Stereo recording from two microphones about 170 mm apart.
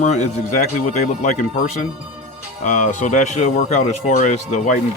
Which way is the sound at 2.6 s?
45° left (ahead or behind).